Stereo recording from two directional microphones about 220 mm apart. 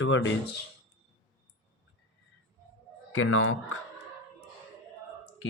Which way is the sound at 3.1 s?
65° left (ahead or behind).